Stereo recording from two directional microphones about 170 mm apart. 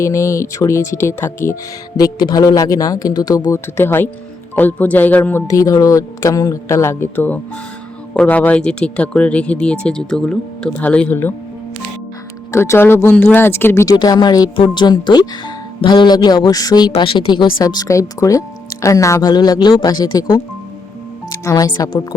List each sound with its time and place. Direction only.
0.0 s speech: 15° left (ahead or behind)
12.5 s speech: 15° left (ahead or behind)